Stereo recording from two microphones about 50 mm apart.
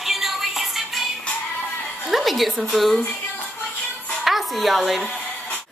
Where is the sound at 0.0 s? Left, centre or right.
Centre.